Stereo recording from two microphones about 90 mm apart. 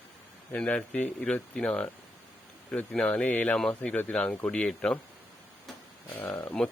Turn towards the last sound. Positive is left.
turn(degrees=20)  # may be behind; listen again after turning